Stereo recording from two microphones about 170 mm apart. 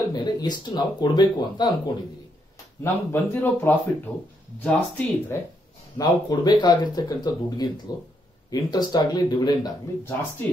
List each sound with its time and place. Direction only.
0.1 s speech: 25° left (ahead or behind)
2.8 s speech: 10° left (ahead or behind)
5.9 s speech: 25° left (ahead or behind)